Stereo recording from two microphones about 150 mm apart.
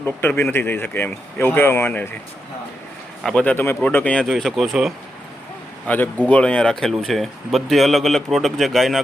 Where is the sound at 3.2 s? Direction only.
10° left (ahead or behind).